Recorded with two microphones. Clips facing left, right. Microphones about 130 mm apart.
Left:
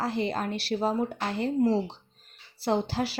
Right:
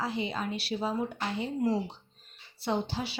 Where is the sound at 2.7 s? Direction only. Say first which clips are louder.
Left 5 dB; 90° left.